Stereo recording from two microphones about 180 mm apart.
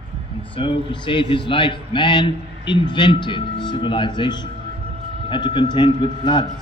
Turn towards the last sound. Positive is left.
turn(degrees=25)  # may be behind; listen again after turning